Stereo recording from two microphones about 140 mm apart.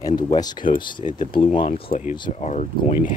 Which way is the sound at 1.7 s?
55° left (ahead or behind).